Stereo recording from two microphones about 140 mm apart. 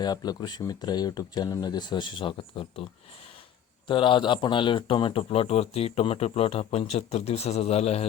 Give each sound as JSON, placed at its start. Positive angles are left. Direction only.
{"t": 0.0, "sound": "speech", "side_deg": 30}
{"t": 3.8, "sound": "speech", "side_deg": 35}